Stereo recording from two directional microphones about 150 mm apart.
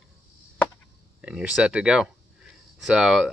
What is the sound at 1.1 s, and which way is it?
Speech, 5° right (ahead or behind).